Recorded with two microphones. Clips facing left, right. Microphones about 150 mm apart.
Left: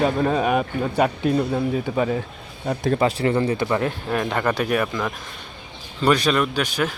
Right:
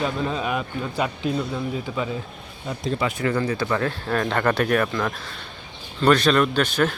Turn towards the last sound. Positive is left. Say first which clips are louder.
# right 2 dB
turn(degrees=10)  # may be behind; listen again after turning